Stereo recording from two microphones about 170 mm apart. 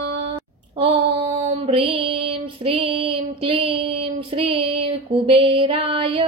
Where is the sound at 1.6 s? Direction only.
30° right (ahead or behind).